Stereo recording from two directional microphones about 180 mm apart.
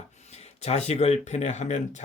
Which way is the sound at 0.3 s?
35° left (ahead or behind).